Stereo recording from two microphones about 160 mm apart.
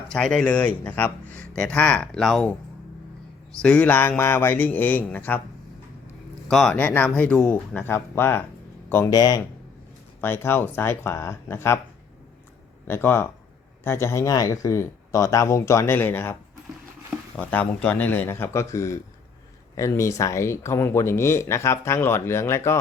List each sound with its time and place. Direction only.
0.1 s speech: 5° left (ahead or behind)
3.6 s speech: 5° left (ahead or behind)
6.5 s speech: 5° left (ahead or behind)
12.9 s speech: 15° left (ahead or behind)